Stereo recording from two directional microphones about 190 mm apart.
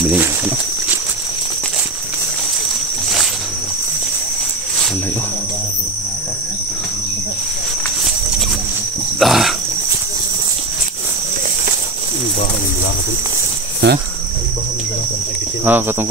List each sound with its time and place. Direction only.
9.2 s a sound: centre (ahead or behind)
13.8 s cricket: 65° right (ahead or behind)
15.6 s cricket: 10° right (ahead or behind)